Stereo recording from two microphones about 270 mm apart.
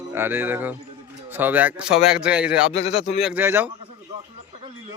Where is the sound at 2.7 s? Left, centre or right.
Left.